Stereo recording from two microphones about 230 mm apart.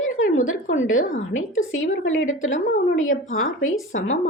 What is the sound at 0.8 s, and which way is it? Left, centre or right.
Speech, left.